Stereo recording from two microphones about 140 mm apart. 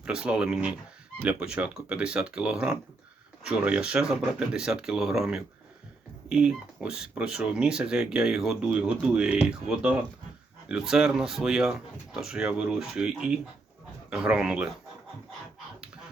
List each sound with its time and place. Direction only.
0.0 s speech: 5° right (ahead or behind)